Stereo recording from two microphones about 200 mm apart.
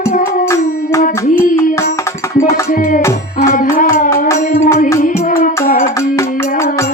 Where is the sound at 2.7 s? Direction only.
45° left (ahead or behind).